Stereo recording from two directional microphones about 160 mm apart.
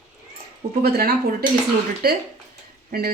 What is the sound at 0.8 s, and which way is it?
Speech, 75° right (ahead or behind).